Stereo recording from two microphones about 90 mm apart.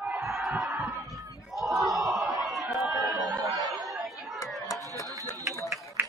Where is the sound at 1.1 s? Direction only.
Centre (ahead or behind).